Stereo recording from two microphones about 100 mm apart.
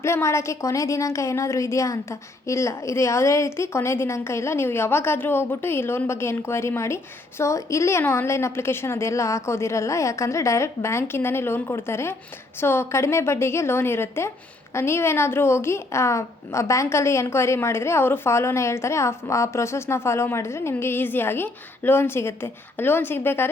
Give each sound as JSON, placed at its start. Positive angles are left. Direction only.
{"t": 0.0, "sound": "a woman's voice", "side_deg": 25}